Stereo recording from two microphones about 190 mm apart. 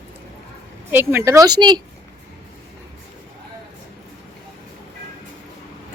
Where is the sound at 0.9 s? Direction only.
10° right (ahead or behind).